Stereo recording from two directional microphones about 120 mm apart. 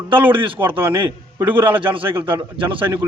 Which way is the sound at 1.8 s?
45° right (ahead or behind).